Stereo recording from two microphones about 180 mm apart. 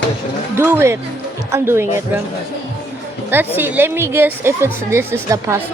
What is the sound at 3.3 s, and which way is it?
A woman's voice, 10° right (ahead or behind).